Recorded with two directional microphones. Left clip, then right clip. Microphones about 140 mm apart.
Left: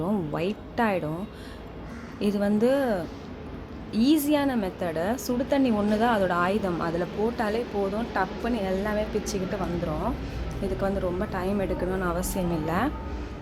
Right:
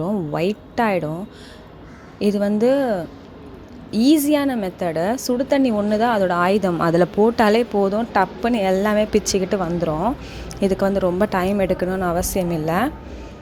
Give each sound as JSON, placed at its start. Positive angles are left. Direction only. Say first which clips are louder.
{"t": 0.3, "sound": "a woman's voice", "louder": "right 9 dB", "side_deg": -40}
{"t": 2.1, "sound": "a woman's voice", "louder": "right 6 dB", "side_deg": -40}
{"t": 11.5, "sound": "a woman's voice", "louder": "right 8 dB", "side_deg": -55}